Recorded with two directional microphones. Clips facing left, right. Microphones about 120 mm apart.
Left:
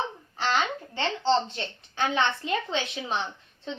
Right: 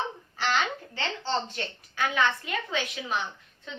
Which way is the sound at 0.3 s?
25° left (ahead or behind).